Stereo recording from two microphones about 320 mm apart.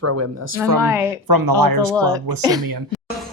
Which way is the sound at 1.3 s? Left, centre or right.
Right.